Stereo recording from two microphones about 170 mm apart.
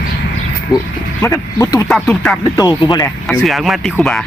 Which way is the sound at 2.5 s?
25° left (ahead or behind).